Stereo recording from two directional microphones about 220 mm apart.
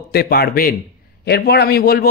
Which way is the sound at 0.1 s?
45° left (ahead or behind).